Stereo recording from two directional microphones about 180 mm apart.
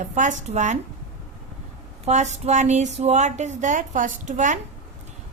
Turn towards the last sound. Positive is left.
turn(degrees=-45)  # may be behind; listen again after turning